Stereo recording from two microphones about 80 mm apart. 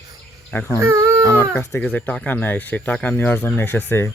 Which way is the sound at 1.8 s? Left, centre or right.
Centre.